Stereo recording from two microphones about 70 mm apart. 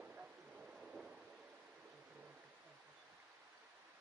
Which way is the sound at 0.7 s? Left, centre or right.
Centre.